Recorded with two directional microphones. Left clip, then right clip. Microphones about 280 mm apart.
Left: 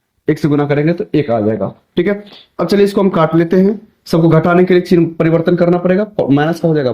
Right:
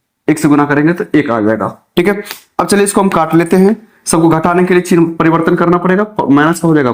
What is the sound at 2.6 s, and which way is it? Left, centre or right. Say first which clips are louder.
Speech: right 1 dB; right.